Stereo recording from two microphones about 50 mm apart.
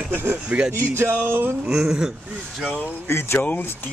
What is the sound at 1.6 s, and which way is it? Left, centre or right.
Speech, right.